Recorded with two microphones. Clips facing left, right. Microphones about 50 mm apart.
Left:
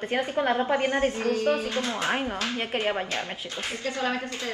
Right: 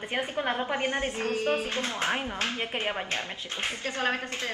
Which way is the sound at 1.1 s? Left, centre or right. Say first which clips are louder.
Left 4 dB; right.